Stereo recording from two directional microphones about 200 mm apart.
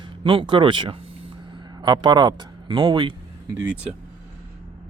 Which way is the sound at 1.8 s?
20° right (ahead or behind).